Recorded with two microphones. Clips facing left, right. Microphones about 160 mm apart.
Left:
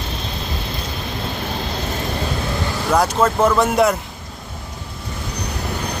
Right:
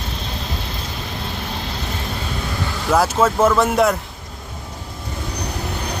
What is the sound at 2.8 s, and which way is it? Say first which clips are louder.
Speech: right 1 dB; 5° right (ahead or behind).